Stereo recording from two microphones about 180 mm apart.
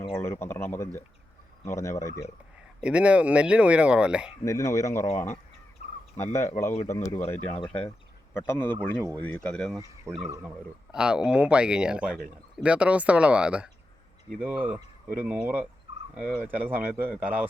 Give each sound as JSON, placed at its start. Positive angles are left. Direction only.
{"t": 0.1, "sound": "speech", "side_deg": 15}
{"t": 2.8, "sound": "speech", "side_deg": -5}
{"t": 4.4, "sound": "speech", "side_deg": 15}
{"t": 6.1, "sound": "speech", "side_deg": 15}
{"t": 8.4, "sound": "speech", "side_deg": 10}
{"t": 10.1, "sound": "speech", "side_deg": -15}
{"t": 10.9, "sound": "speech", "side_deg": -5}